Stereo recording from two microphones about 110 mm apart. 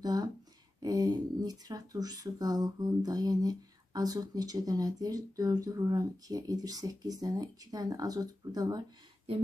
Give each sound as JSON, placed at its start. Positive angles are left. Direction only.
{"t": 0.0, "sound": "speech", "side_deg": -35}